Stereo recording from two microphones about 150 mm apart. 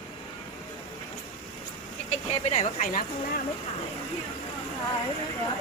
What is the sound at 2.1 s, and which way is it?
Speech, 45° left (ahead or behind).